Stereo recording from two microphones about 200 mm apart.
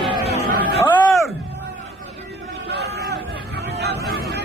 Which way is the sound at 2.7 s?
55° right (ahead or behind).